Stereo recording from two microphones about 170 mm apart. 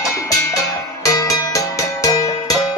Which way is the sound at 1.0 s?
20° left (ahead or behind).